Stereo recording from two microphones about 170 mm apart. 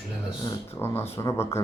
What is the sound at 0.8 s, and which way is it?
Speech, 15° left (ahead or behind).